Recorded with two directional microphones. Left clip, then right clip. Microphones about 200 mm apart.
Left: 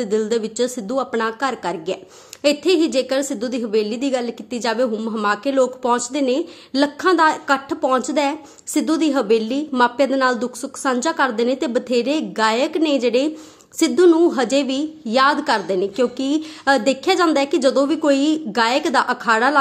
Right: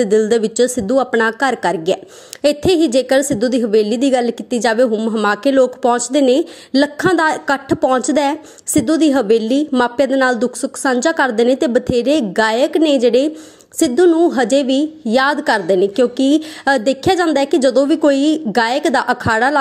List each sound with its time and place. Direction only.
0.0 s a woman's voice: 25° right (ahead or behind)